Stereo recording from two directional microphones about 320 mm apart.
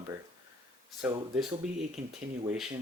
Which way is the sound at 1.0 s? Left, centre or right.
Centre.